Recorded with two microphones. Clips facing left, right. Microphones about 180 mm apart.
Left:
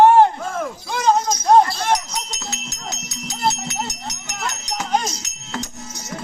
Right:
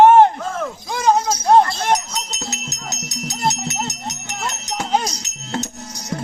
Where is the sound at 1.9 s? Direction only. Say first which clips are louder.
Right 1 dB; 20° right (ahead or behind).